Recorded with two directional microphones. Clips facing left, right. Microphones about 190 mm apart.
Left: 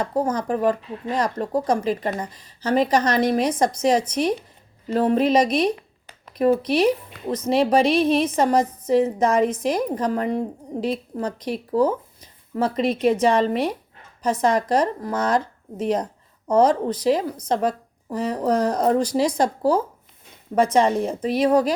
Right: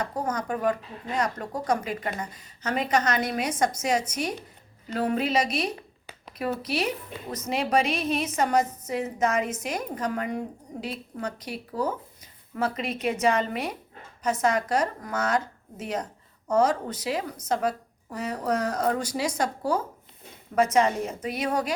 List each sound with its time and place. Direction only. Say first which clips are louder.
0.0 s a woman's voice: left 6 dB; 30° left (ahead or behind)
7.3 s a woman's voice: left 9 dB; 30° left (ahead or behind)